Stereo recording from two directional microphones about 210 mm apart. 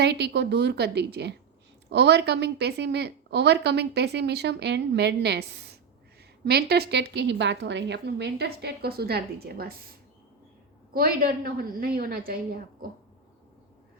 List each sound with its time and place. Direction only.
0.0 s a woman's voice: 50° right (ahead or behind)
10.9 s a woman's voice: 45° right (ahead or behind)